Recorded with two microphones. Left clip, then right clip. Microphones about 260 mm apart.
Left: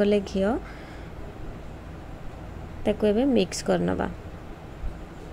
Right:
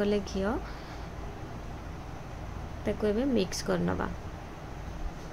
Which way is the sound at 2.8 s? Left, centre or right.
Centre.